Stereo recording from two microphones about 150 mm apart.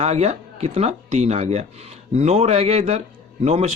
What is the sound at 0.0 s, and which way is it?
Speech, 45° right (ahead or behind).